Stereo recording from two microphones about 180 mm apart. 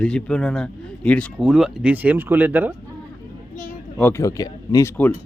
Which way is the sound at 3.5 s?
45° left (ahead or behind).